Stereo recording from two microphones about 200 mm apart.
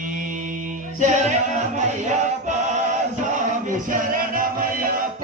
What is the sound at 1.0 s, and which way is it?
Music, 35° right (ahead or behind).